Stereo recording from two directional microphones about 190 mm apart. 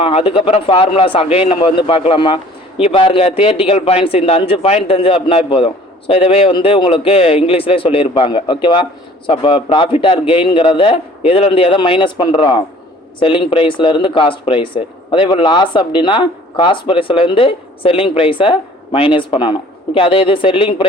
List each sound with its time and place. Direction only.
0.0 s a man's voice: 30° left (ahead or behind)